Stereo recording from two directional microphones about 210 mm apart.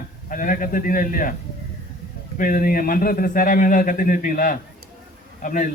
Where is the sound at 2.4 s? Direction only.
40° left (ahead or behind).